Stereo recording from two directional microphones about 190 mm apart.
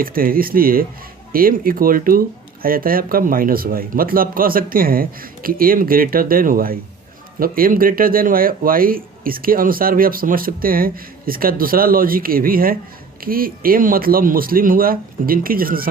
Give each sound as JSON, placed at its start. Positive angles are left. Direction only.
{"t": 0.0, "sound": "speech", "side_deg": -50}